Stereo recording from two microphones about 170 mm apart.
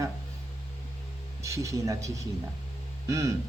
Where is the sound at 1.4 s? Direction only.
20° right (ahead or behind).